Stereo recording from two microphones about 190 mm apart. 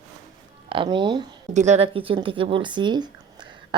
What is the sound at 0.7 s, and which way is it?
Speech, 25° right (ahead or behind).